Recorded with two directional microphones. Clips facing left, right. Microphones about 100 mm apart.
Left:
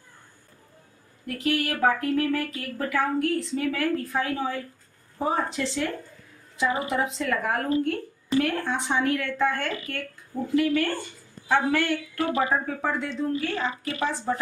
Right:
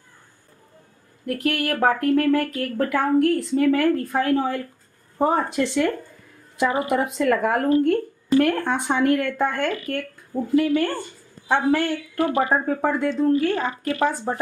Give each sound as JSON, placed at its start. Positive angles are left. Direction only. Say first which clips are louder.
{"t": 1.4, "sound": "speech", "louder": "right 2 dB", "side_deg": -50}
{"t": 10.8, "sound": "a woman's voice", "louder": "right 3 dB", "side_deg": -40}